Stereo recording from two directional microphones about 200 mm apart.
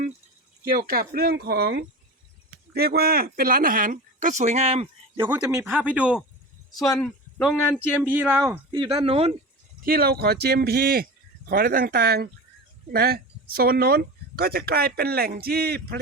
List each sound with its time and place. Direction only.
0.7 s speech: 45° right (ahead or behind); by 5.4 s 25° right (ahead or behind)
5.4 s speech: 15° right (ahead or behind)
6.7 s speech: 15° left (ahead or behind)
7.0 s speech: 5° left (ahead or behind)
8.0 s speech: 10° right (ahead or behind)
8.7 s speech: 25° right (ahead or behind)
9.8 s speech: 50° right (ahead or behind)